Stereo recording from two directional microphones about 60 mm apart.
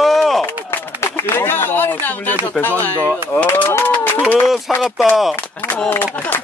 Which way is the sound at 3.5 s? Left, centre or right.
Left.